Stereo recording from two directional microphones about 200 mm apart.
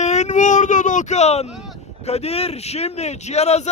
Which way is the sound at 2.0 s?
30° left (ahead or behind).